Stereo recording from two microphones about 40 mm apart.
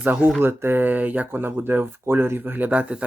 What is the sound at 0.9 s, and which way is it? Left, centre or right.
Speech, right.